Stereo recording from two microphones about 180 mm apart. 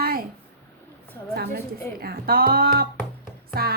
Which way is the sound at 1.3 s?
60° right (ahead or behind).